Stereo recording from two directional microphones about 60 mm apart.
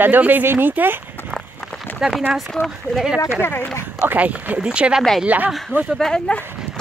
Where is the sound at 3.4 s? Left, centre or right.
Left.